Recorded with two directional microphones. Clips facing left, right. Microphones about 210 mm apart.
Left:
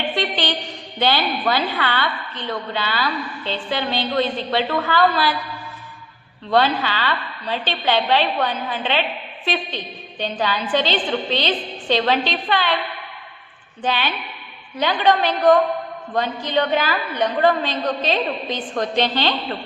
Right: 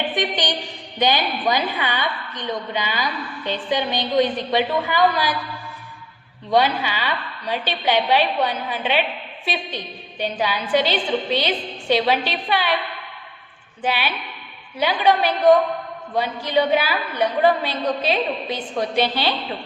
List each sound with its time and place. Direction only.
0.1 s a sound: 15° right (ahead or behind)
0.9 s a woman's voice: 15° right (ahead or behind)
6.5 s a woman's voice: 10° right (ahead or behind)
13.8 s a woman's voice: 10° right (ahead or behind)